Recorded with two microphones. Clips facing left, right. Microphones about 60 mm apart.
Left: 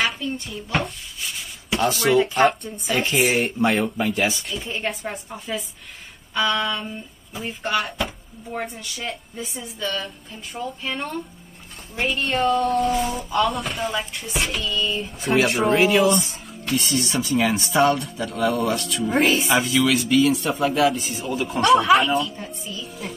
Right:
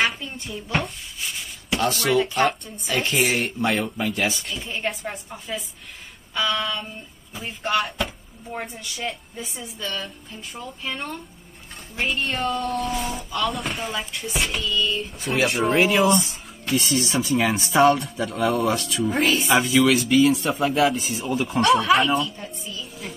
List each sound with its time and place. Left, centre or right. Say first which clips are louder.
0.0 s a man's voice: even; centre